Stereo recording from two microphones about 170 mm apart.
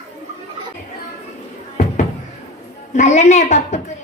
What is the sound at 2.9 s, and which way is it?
A man's voice, 45° left (ahead or behind).